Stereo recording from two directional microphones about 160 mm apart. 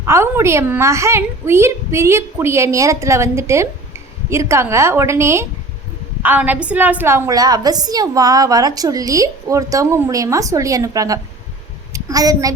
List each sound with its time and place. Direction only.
0.0 s a woman's voice: 15° right (ahead or behind)